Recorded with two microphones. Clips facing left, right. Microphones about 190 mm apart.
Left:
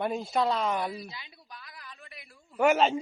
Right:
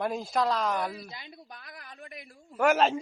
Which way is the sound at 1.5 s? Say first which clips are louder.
Right 1 dB; 50° right (ahead or behind).